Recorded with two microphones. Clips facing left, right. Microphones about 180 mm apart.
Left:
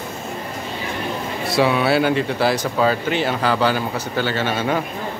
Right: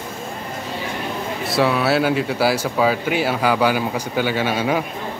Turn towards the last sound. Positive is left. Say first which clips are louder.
# right 1 dB
turn(degrees=-10)  # may be behind; listen again after turning